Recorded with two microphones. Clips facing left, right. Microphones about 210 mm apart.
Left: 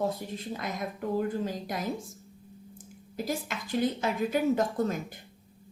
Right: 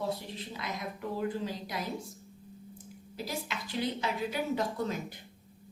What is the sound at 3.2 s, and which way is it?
A woman's voice, 50° left (ahead or behind).